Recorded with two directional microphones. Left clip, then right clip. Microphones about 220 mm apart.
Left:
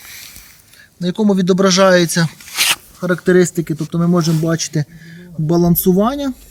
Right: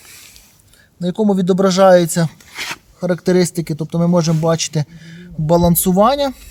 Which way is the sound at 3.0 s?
25° right (ahead or behind).